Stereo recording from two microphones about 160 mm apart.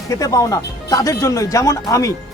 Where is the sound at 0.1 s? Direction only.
20° left (ahead or behind).